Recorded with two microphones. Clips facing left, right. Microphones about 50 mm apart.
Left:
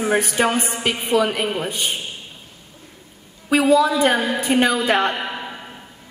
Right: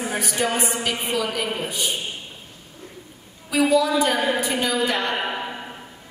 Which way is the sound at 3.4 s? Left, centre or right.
Left.